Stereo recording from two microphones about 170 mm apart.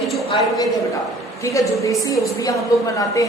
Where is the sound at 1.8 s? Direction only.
20° left (ahead or behind).